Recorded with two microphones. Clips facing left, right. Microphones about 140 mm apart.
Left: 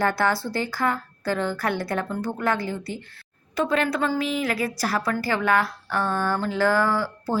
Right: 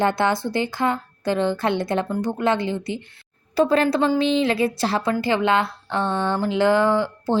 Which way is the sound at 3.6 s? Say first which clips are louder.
Right 5 dB; 35° right (ahead or behind).